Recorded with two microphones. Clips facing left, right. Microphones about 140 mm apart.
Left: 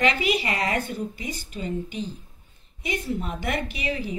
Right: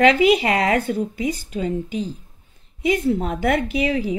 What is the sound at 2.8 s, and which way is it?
A woman's voice, 90° right.